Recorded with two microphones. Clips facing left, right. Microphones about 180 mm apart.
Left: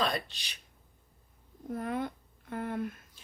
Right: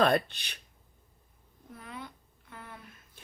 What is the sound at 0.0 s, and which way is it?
Speech, 55° right (ahead or behind).